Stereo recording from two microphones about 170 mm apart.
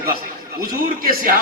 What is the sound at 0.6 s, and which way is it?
Speech, 60° right (ahead or behind).